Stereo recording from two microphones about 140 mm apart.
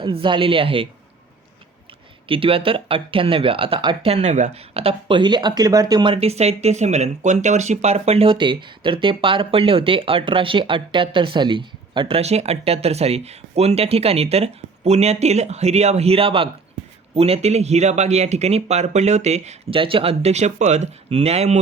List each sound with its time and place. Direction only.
0.0 s speech: 35° right (ahead or behind)
2.2 s speech: 40° right (ahead or behind)
4.1 s speech: 50° right (ahead or behind); by 6.1 s 30° right (ahead or behind)
6.1 s speech: 50° right (ahead or behind)